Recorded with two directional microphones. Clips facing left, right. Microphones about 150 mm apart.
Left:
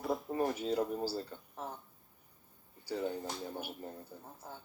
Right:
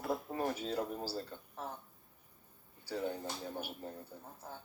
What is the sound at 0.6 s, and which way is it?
Speech, 10° left (ahead or behind).